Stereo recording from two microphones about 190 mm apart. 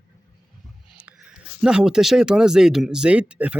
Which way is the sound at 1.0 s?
5° right (ahead or behind).